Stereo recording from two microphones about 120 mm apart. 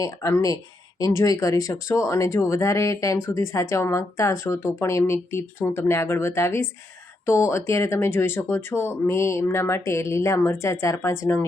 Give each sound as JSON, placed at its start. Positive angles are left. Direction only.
{"t": 0.0, "sound": "speech", "side_deg": 25}